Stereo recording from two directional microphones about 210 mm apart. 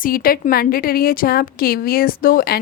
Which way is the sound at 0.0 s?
40° left (ahead or behind).